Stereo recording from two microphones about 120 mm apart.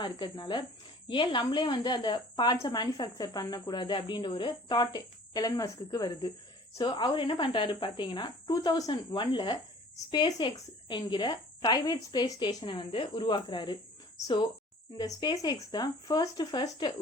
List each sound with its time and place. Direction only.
0.0 s a woman's voice: 40° left (ahead or behind)
14.9 s a woman's voice: 35° left (ahead or behind)